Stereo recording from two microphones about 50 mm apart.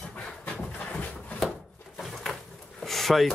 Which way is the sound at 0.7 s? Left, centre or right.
Left.